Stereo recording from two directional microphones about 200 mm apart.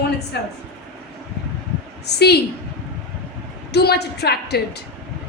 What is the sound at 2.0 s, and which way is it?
Speech, 55° left (ahead or behind).